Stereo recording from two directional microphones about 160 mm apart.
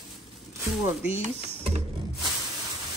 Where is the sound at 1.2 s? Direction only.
40° right (ahead or behind).